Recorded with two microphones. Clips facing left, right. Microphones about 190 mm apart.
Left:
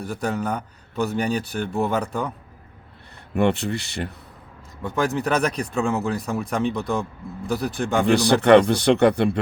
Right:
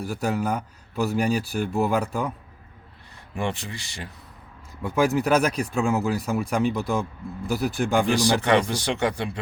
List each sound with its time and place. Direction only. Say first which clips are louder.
0.0 s speech: even; 5° right (ahead or behind)
3.3 s speech: left 8 dB; 65° left (ahead or behind)
4.8 s speech: right 2 dB; 5° right (ahead or behind)
8.0 s speech: left 5 dB; 65° left (ahead or behind)